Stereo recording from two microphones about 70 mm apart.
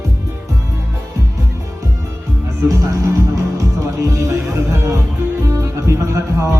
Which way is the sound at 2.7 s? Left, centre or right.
Right.